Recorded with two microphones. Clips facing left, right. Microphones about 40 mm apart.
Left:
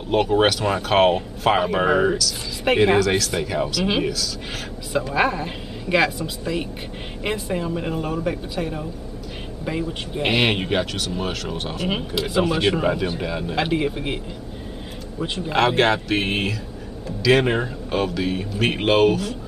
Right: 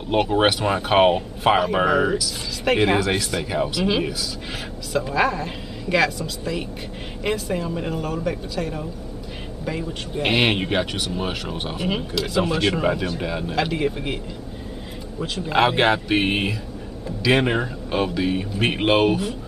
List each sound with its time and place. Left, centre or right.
0.1 s speech: centre
1.7 s speech: centre
2.7 s speech: centre
5.1 s speech: centre
10.2 s speech: centre
11.9 s speech: centre
12.7 s speech: centre
13.6 s speech: centre
15.5 s speech: centre